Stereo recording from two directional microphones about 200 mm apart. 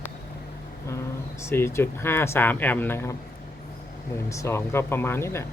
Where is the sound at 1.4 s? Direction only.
15° left (ahead or behind).